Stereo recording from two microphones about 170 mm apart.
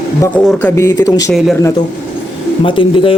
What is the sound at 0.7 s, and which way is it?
Speech, 20° left (ahead or behind).